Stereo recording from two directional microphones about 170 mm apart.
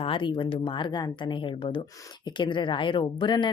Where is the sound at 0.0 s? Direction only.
30° left (ahead or behind).